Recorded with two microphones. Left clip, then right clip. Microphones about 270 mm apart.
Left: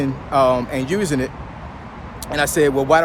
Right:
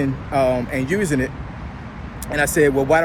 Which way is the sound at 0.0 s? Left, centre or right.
Centre.